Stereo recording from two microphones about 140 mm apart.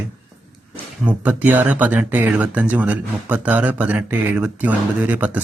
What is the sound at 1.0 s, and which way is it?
Speech, 10° right (ahead or behind).